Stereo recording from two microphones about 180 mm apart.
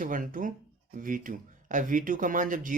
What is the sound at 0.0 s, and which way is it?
Speech, 50° right (ahead or behind).